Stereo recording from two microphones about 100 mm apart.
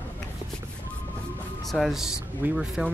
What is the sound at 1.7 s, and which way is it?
Speech, centre (ahead or behind).